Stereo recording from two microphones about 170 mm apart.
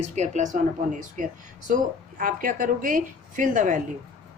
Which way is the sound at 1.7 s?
50° right (ahead or behind).